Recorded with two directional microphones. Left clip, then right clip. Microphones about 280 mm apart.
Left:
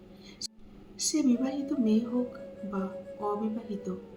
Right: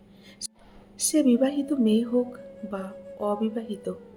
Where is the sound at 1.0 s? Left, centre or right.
Right.